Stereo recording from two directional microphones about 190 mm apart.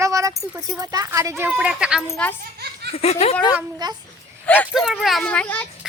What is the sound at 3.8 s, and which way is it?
Speech, 25° right (ahead or behind).